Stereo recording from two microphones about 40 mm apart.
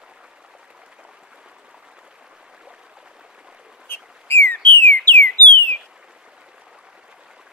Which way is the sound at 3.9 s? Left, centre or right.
Left.